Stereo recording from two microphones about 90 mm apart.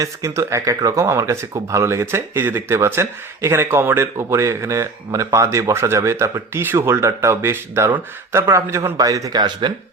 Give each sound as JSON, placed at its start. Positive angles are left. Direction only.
{"t": 0.0, "sound": "speech", "side_deg": -35}